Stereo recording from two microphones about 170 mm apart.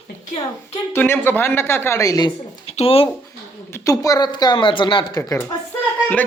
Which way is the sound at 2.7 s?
35° left (ahead or behind).